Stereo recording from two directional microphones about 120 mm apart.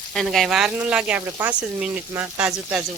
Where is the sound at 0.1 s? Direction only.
Centre (ahead or behind).